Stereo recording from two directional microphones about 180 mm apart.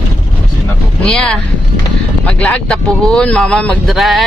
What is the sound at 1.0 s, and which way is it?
Speech, 5° left (ahead or behind).